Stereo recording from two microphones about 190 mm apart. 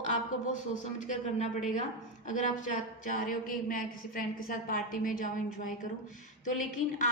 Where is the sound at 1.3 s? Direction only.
40° left (ahead or behind).